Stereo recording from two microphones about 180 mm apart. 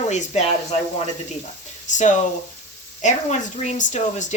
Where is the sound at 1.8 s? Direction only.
45° left (ahead or behind).